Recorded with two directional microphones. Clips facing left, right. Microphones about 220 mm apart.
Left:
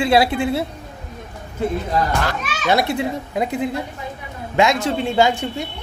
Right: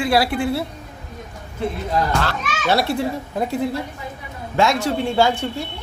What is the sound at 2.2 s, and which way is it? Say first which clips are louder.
A child's voice: left 1 dB; 15° left (ahead or behind).